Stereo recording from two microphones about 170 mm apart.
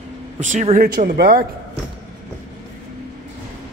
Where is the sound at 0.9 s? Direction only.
65° right (ahead or behind).